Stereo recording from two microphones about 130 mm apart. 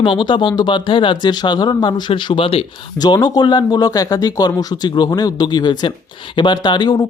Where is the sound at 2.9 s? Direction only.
30° left (ahead or behind).